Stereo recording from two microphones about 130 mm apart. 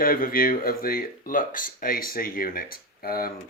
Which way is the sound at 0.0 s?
90° left.